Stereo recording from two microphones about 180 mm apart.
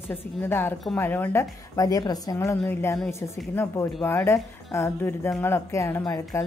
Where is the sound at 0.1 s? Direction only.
10° left (ahead or behind).